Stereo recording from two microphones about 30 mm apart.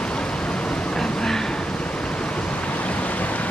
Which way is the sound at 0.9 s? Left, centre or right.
Centre.